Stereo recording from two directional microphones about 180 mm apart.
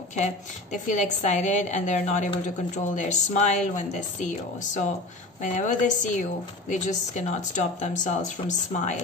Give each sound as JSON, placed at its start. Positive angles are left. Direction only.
{"t": 0.1, "sound": "speech", "side_deg": 40}